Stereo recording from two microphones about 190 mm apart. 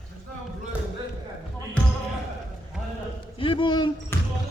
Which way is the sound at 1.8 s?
5° left (ahead or behind).